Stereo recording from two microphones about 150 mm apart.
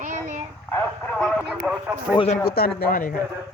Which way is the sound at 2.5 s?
90° left.